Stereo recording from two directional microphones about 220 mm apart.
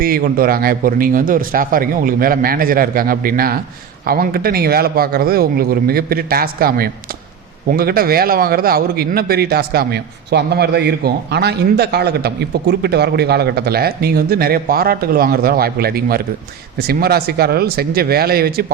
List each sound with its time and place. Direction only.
0.0 s a man's voice: 40° right (ahead or behind)